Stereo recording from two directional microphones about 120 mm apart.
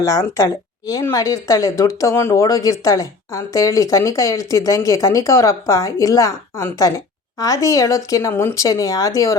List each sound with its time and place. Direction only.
0.0 s speech: 25° left (ahead or behind)